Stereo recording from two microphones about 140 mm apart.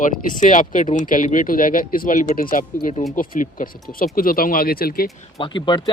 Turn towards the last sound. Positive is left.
turn(degrees=35)  # may be behind; listen again after turning